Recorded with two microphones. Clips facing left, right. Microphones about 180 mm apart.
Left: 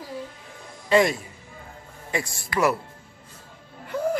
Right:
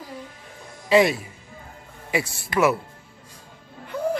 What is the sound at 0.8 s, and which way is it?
Speech, 5° right (ahead or behind).